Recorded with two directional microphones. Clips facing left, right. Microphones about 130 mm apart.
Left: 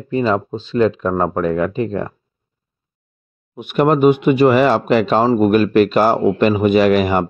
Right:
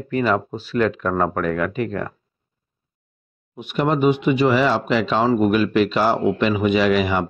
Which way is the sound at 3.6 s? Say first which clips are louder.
Left 6 dB; 55° left (ahead or behind).